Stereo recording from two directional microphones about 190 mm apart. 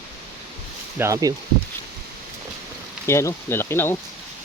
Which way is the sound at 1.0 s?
15° right (ahead or behind).